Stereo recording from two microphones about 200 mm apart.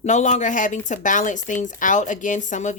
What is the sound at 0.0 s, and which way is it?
Speech, 35° left (ahead or behind).